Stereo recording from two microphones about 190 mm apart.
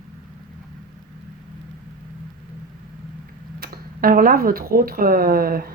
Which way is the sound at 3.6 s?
50° right (ahead or behind).